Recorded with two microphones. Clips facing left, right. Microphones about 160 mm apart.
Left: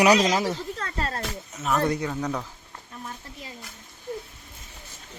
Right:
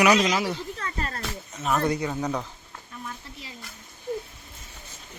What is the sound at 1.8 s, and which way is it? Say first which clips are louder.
Wild animals: even; centre (ahead or behind).